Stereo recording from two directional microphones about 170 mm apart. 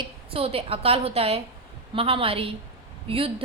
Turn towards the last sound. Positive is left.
turn(degrees=-35)  # may be behind; listen again after turning